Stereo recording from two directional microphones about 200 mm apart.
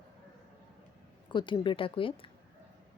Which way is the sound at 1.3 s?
25° left (ahead or behind).